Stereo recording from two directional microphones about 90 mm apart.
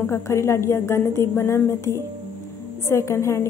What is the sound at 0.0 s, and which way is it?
A woman's voice, 30° left (ahead or behind).